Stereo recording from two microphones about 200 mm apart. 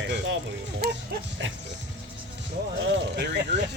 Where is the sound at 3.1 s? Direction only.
55° right (ahead or behind).